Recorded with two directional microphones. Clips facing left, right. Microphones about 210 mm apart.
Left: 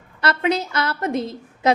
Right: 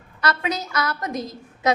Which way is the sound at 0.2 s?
30° left (ahead or behind).